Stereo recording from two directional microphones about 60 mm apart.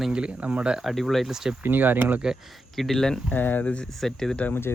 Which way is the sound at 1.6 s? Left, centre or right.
Right.